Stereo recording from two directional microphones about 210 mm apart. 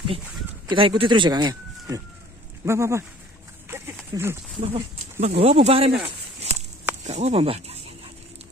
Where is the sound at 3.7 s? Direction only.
10° right (ahead or behind).